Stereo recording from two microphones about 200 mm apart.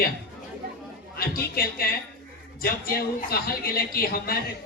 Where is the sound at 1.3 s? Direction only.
50° left (ahead or behind).